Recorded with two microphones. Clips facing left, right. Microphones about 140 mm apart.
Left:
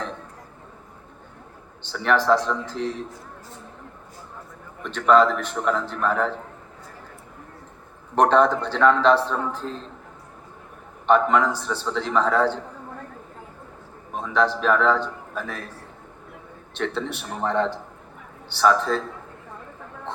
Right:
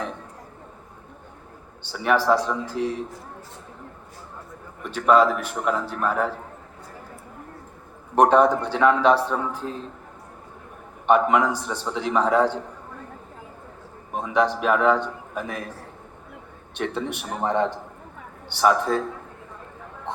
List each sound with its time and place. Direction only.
1.8 s a man's voice: 10° right (ahead or behind)
4.8 s a man's voice: 10° right (ahead or behind)
8.1 s a man's voice: 10° right (ahead or behind)
11.0 s a man's voice: 15° right (ahead or behind)
14.1 s a man's voice: 15° right (ahead or behind)
16.7 s a man's voice: 15° right (ahead or behind)
20.1 s speech: 15° right (ahead or behind)